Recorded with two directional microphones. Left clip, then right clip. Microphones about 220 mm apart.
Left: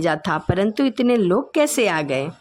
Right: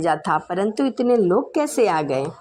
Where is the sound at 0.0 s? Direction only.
35° left (ahead or behind).